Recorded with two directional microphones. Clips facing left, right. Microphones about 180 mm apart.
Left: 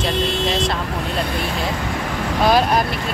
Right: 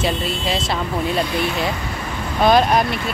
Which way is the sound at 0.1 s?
75° left (ahead or behind).